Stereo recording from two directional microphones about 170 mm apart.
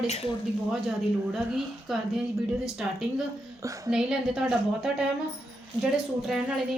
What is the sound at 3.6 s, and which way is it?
Speech, 20° right (ahead or behind).